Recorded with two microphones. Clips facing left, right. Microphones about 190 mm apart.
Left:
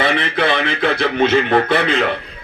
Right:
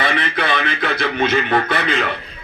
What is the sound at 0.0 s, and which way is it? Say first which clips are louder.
Speech: left 3 dB; 25° left (ahead or behind).